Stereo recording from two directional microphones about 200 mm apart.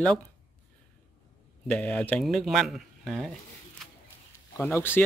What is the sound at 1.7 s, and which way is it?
Speech, 5° left (ahead or behind).